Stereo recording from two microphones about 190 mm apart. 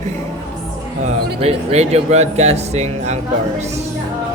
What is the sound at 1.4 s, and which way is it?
Speech, 35° right (ahead or behind).